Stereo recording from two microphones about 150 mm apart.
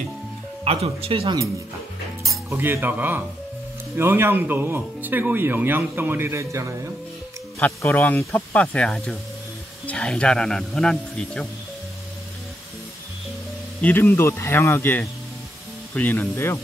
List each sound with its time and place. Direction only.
0.7 s speech: 40° right (ahead or behind)
2.5 s speech: 15° right (ahead or behind)
7.8 s speech: 10° left (ahead or behind)
13.7 s speech: 10° left (ahead or behind)